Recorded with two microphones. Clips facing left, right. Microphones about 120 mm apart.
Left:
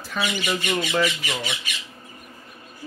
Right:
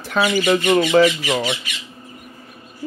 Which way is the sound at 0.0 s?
70° right (ahead or behind).